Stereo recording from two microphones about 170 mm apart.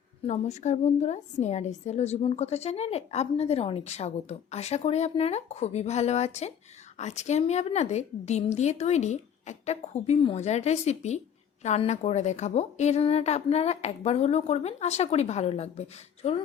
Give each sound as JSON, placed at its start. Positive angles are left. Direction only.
{"t": 0.3, "sound": "a woman's voice", "side_deg": 40}